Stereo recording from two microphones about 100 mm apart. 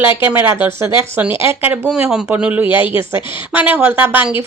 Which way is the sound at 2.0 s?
10° right (ahead or behind).